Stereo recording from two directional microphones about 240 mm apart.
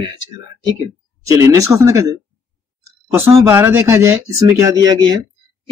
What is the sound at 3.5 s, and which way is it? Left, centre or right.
Speech, centre.